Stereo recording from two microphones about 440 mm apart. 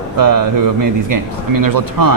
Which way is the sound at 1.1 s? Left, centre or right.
Right.